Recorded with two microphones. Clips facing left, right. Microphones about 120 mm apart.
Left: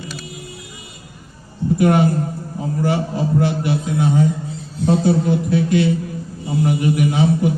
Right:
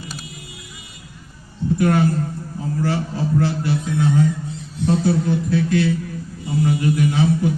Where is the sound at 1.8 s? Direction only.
20° left (ahead or behind).